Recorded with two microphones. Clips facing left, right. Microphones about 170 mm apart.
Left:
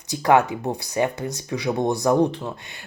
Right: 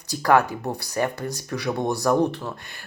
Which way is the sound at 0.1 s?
20° left (ahead or behind).